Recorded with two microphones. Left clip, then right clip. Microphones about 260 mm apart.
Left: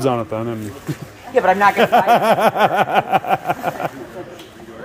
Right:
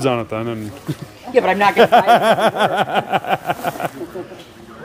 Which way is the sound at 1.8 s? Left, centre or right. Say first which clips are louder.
Right 2 dB; centre.